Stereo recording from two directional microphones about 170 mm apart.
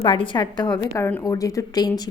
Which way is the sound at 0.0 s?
30° left (ahead or behind).